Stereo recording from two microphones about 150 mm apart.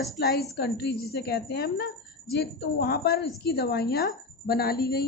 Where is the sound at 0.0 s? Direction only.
90° left.